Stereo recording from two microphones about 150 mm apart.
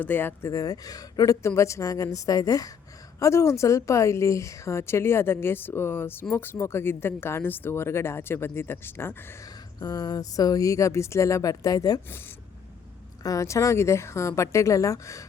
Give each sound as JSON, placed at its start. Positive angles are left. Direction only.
{"t": 0.0, "sound": "a woman's voice", "side_deg": 15}
{"t": 13.2, "sound": "a woman's voice", "side_deg": 20}